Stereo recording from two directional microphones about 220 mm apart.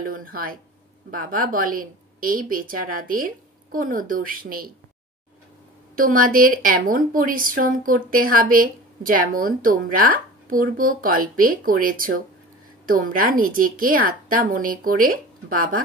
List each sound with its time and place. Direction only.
0.0 s a woman's voice: 40° right (ahead or behind)
5.9 s a woman's voice: 40° right (ahead or behind)